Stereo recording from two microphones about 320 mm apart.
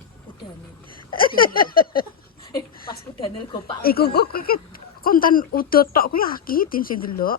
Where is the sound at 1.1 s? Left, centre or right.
Left.